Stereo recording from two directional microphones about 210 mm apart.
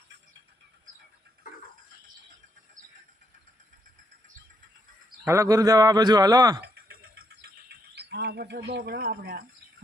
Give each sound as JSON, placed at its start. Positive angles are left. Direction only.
{"t": 5.2, "sound": "a man's voice", "side_deg": -15}
{"t": 6.6, "sound": "a sound", "side_deg": -50}
{"t": 7.9, "sound": "speech", "side_deg": -50}